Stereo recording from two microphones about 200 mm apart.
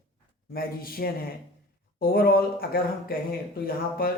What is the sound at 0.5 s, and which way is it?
Speech, 45° left (ahead or behind).